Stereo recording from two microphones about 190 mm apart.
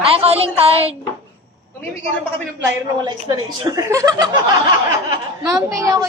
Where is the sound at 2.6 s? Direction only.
20° right (ahead or behind).